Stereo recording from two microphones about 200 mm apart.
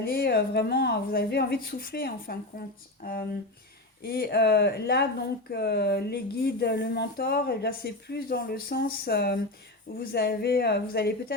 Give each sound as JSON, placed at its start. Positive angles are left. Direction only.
{"t": 0.0, "sound": "speech", "side_deg": 50}